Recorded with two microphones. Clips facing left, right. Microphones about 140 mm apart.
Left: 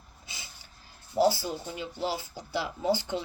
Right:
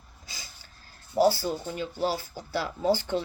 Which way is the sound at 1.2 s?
20° left (ahead or behind).